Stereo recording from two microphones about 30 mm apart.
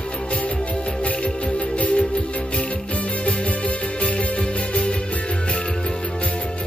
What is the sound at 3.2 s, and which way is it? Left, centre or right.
Music, left.